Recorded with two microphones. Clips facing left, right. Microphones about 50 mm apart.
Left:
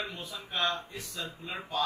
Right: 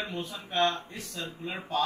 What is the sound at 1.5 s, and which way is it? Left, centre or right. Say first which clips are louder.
Speech: right 3 dB; centre.